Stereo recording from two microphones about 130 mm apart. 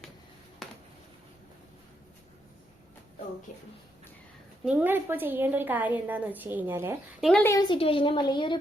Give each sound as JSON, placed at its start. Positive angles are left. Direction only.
{"t": 0.6, "sound": "a sound", "side_deg": 0}
{"t": 4.6, "sound": "a woman's voice", "side_deg": -10}
{"t": 7.2, "sound": "a woman's voice", "side_deg": 0}
{"t": 7.6, "sound": "a woman's voice", "side_deg": 40}